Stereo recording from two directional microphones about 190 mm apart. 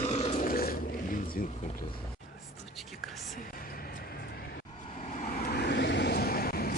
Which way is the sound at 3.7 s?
50° left (ahead or behind).